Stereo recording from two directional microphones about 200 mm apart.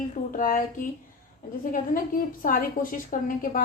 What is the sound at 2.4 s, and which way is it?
Speech, 45° left (ahead or behind).